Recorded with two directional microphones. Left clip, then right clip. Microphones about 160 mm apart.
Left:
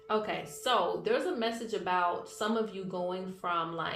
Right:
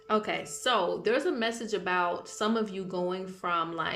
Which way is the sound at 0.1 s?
60° right (ahead or behind).